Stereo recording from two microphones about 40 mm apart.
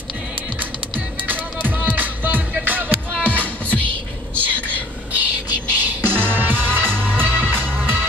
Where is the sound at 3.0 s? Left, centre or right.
Left.